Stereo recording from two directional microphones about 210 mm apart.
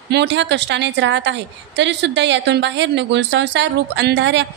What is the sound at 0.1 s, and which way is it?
A woman's voice, 55° right (ahead or behind).